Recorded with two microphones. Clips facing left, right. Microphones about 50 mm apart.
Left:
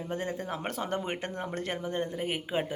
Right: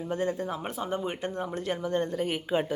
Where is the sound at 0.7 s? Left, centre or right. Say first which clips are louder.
Right 1 dB; left.